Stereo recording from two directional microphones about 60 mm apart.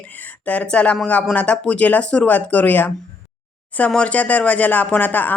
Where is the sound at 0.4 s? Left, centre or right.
Left.